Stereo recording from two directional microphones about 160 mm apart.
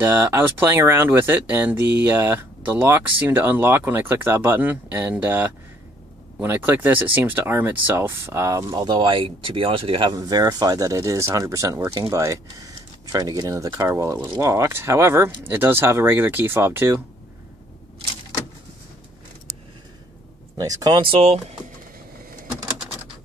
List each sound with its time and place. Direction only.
0.1 s speech: 15° right (ahead or behind)
20.6 s speech: 25° right (ahead or behind); by 21.5 s 40° right (ahead or behind)